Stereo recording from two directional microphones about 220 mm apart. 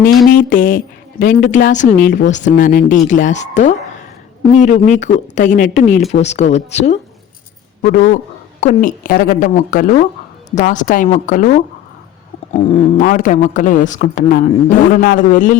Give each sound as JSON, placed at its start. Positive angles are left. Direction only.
{"t": 0.3, "sound": "a man's voice", "side_deg": 40}